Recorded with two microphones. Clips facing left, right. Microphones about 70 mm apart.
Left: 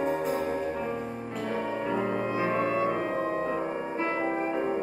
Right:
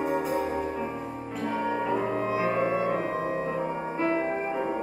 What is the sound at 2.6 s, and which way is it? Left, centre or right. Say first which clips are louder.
Music: right 1 dB; centre.